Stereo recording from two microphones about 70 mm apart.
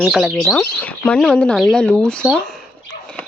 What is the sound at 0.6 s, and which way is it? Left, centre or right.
Speech, left.